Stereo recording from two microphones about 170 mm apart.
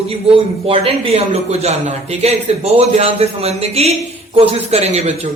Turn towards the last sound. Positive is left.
turn(degrees=-40)  # may be behind; listen again after turning